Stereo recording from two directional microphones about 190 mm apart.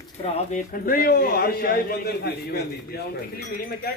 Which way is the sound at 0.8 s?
50° left (ahead or behind).